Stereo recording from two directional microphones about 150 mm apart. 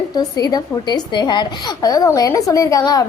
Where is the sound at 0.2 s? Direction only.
25° left (ahead or behind).